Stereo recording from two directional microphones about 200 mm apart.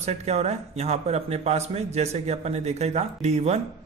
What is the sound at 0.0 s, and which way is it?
Speech, 35° right (ahead or behind).